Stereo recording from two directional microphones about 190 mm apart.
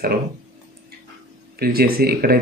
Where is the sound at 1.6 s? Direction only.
50° right (ahead or behind).